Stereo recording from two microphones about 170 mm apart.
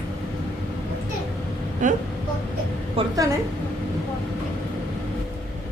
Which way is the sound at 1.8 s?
50° right (ahead or behind).